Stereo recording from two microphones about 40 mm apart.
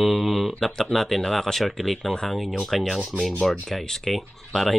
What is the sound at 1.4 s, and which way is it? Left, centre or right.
Speech, centre.